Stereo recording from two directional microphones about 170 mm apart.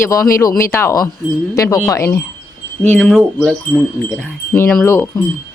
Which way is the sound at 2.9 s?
5° left (ahead or behind).